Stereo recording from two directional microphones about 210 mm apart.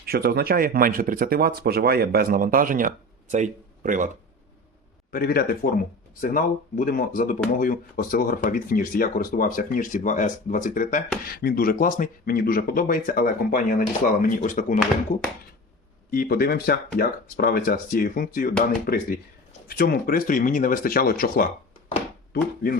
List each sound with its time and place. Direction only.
0.0 s speech: 45° right (ahead or behind)
5.1 s speech: 45° left (ahead or behind)